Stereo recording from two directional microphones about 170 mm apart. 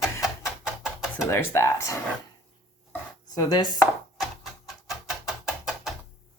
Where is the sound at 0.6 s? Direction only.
5° right (ahead or behind).